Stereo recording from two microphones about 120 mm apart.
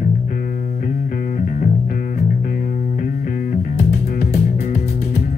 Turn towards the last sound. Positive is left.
turn(degrees=65)  # may be behind; listen again after turning